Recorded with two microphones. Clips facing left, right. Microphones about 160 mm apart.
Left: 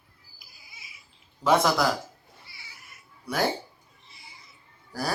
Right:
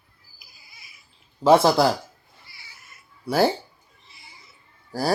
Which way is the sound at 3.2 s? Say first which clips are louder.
Right 7 dB; 30° right (ahead or behind).